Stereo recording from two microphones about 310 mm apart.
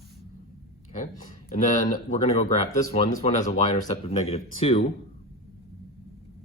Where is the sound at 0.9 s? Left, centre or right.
Left.